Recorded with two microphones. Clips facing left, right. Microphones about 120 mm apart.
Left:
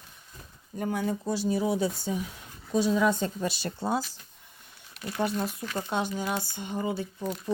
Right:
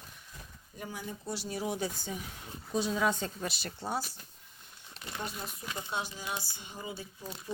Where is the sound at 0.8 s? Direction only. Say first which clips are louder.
Left 12 dB; 65° left (ahead or behind).